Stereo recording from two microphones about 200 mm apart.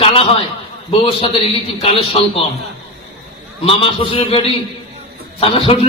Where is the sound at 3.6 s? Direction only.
30° left (ahead or behind).